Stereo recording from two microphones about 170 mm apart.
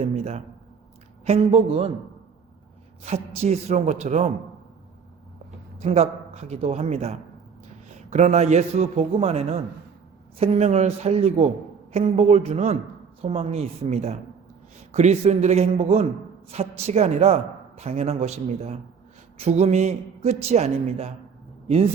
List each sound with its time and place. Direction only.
0.0 s a man's voice: 40° right (ahead or behind)
3.0 s a woman's voice: 40° right (ahead or behind)
5.8 s a woman's voice: 35° right (ahead or behind)